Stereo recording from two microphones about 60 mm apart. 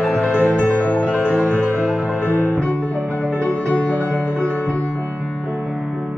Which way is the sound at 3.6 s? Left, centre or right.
Left.